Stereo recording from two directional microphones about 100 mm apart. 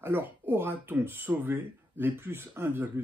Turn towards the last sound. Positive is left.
turn(degrees=-20)  # may be behind; listen again after turning